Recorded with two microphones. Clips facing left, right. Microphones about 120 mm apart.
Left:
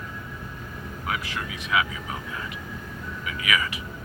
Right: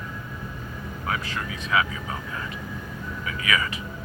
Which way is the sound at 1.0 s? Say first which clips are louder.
Right 1 dB; 15° left (ahead or behind).